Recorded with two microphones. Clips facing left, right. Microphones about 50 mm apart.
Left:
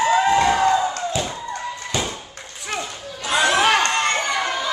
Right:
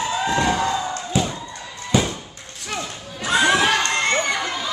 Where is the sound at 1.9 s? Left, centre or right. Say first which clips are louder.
Right 6 dB; centre.